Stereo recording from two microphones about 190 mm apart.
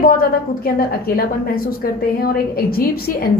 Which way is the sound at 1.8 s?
50° left (ahead or behind).